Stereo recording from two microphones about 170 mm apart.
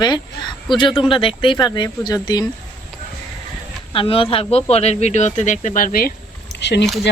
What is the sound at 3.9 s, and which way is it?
Speech, 30° left (ahead or behind).